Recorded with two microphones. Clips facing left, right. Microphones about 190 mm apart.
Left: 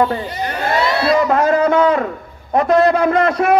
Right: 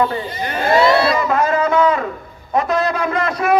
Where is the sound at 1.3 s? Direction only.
65° left (ahead or behind).